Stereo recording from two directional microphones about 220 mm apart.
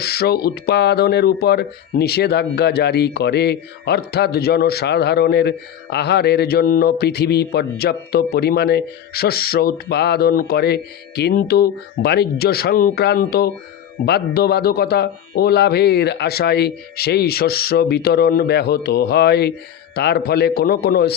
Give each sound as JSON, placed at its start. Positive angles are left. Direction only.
{"t": 0.0, "sound": "speech", "side_deg": 45}